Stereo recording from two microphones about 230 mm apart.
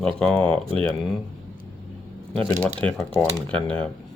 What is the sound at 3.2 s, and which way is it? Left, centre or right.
Speech, centre.